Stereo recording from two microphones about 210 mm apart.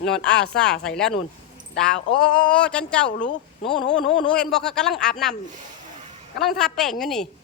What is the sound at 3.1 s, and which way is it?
Speech, 35° left (ahead or behind).